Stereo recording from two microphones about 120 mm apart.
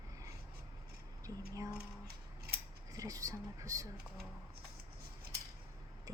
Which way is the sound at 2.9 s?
30° right (ahead or behind).